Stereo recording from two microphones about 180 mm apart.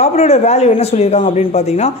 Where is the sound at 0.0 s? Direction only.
40° left (ahead or behind).